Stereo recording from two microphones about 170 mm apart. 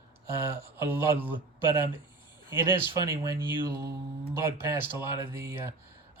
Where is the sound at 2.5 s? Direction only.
15° right (ahead or behind).